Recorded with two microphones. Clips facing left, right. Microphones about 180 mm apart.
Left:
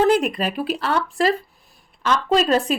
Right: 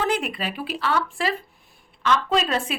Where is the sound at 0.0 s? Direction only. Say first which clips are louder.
Left 8 dB; 45° left (ahead or behind).